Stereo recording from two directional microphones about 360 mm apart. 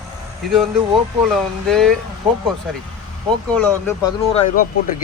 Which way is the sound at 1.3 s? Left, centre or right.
Centre.